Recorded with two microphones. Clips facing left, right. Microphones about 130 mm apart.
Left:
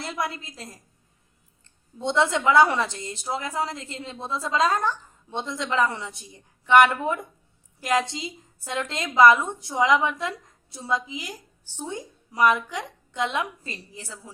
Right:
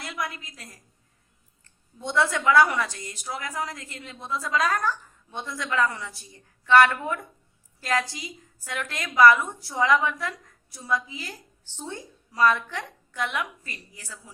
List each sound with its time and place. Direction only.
0.0 s a woman's voice: 30° left (ahead or behind)